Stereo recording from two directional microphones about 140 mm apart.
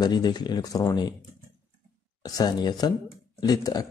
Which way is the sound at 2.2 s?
30° left (ahead or behind).